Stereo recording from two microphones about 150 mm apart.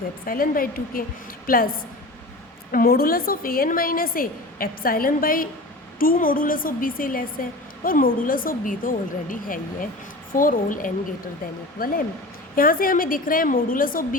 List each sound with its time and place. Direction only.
0.3 s a woman's voice: 75° left (ahead or behind)